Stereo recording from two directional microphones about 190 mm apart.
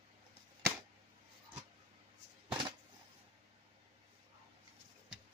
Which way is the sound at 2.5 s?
25° right (ahead or behind).